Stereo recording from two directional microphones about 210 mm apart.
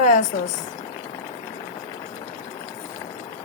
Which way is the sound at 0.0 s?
35° left (ahead or behind).